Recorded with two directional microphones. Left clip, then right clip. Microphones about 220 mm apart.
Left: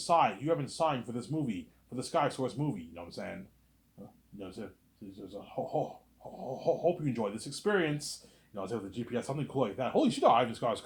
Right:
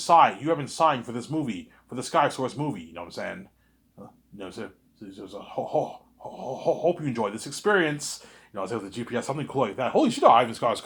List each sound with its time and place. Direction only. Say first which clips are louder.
0.0 s speech: right 9 dB; 25° right (ahead or behind)
4.4 s speech: right 7 dB; 25° right (ahead or behind)